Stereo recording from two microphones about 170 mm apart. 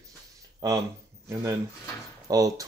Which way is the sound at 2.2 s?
20° right (ahead or behind).